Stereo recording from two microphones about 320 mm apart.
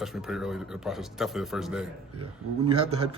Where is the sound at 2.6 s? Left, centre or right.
Centre.